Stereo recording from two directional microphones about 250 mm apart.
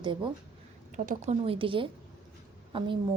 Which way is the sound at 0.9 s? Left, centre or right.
Right.